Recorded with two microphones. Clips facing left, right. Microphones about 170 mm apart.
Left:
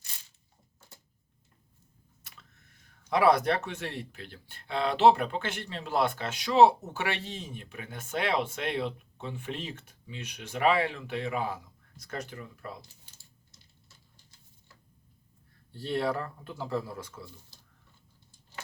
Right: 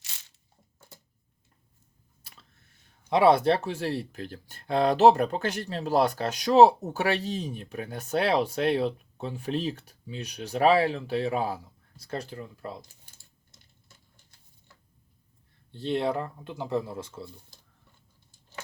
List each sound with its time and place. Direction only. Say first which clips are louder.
3.1 s speech: right 3 dB; 25° right (ahead or behind)
15.7 s speech: right 3 dB; 20° right (ahead or behind)